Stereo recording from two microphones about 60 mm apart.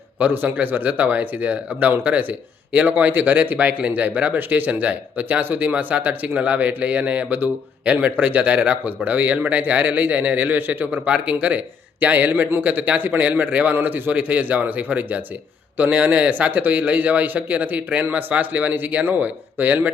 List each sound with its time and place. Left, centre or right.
0.2 s speech: right